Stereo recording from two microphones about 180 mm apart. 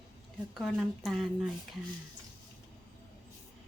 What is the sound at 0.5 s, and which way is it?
Speech, centre (ahead or behind).